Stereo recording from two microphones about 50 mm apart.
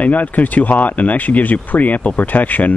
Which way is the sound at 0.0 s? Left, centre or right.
Left.